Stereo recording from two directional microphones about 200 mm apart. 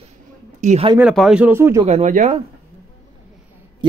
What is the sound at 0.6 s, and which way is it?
Speech, 30° right (ahead or behind).